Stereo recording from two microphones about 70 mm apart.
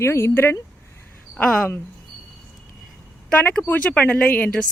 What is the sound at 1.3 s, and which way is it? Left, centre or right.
Speech, centre.